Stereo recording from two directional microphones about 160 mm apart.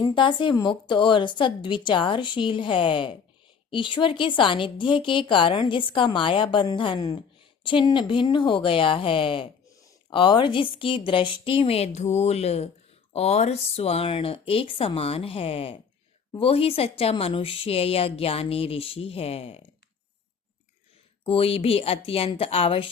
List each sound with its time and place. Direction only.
0.0 s a woman's voice: 30° left (ahead or behind)
21.2 s a woman's voice: 35° left (ahead or behind)